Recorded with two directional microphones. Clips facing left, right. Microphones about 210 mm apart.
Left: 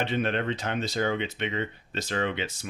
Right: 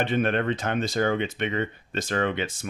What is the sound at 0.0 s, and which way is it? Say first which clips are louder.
Speech: right 3 dB; 50° right (ahead or behind).